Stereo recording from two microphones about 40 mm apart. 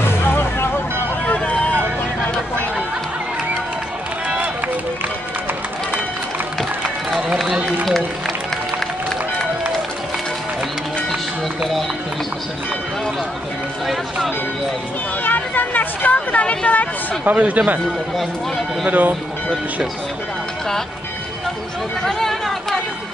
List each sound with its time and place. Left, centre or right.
0.0 s music: left
1.4 s vehicle: left
15.2 s a sound: left
17.2 s speech: right
18.9 s speech: right
22.0 s chatter: centre